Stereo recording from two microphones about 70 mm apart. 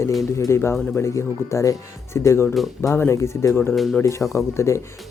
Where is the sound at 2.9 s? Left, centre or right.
Left.